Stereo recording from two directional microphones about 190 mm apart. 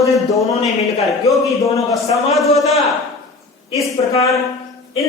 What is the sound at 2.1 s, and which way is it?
Speech, centre (ahead or behind).